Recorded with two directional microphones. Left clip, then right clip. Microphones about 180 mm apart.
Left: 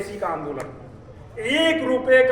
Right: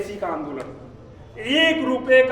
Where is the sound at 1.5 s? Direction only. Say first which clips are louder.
Right 1 dB; 15° right (ahead or behind).